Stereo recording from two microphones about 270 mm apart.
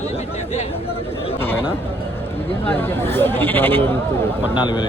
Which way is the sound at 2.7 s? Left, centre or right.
Centre.